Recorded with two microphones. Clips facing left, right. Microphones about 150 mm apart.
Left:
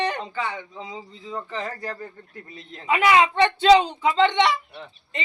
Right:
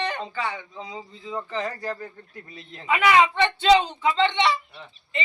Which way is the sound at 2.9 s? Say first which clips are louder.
Left 1 dB; 35° left (ahead or behind).